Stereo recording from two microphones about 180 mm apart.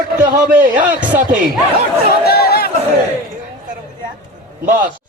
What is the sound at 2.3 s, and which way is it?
Chatter, 60° left (ahead or behind).